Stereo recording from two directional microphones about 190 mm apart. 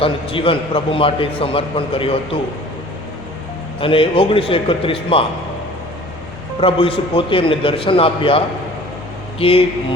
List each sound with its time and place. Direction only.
0.0 s a man's voice: 30° left (ahead or behind)
3.8 s a man's voice: 30° left (ahead or behind)
6.6 s a man's voice: 30° left (ahead or behind)